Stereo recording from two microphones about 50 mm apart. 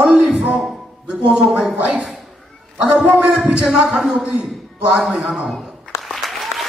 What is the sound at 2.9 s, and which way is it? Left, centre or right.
A man's voice, right.